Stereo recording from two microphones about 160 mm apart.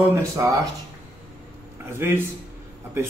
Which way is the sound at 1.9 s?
15° right (ahead or behind).